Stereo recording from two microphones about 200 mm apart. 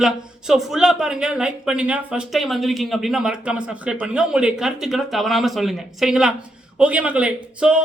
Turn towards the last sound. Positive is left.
turn(degrees=-5)  # may be behind; listen again after turning